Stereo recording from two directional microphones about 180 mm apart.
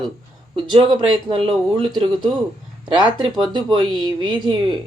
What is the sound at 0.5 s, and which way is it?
Speech, 25° right (ahead or behind).